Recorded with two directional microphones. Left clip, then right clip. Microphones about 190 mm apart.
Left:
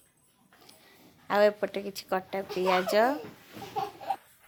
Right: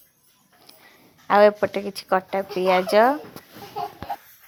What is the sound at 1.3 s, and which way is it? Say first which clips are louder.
Speech: right 8 dB; 20° right (ahead or behind).